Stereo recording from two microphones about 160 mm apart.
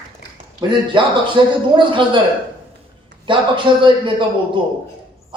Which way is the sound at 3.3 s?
30° right (ahead or behind).